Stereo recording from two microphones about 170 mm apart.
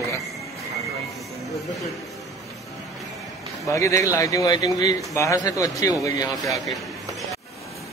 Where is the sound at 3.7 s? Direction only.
20° left (ahead or behind).